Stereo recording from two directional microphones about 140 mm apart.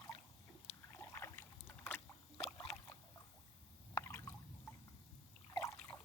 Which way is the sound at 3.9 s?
20° left (ahead or behind).